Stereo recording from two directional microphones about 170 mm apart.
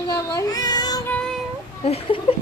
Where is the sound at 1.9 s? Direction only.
35° left (ahead or behind).